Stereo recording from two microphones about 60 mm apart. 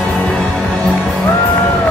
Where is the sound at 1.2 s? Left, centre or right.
Centre.